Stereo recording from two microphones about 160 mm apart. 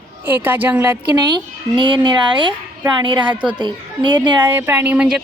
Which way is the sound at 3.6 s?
30° right (ahead or behind).